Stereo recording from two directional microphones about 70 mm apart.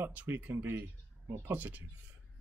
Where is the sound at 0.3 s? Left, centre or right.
Right.